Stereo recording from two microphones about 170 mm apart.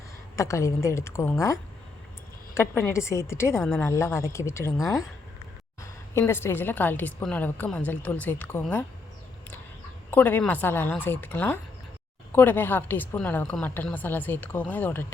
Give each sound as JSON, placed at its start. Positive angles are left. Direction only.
{"t": 0.3, "sound": "a woman's voice", "side_deg": 15}
{"t": 2.6, "sound": "a woman's voice", "side_deg": 15}
{"t": 5.8, "sound": "a woman's voice", "side_deg": 15}
{"t": 10.1, "sound": "a woman's voice", "side_deg": 10}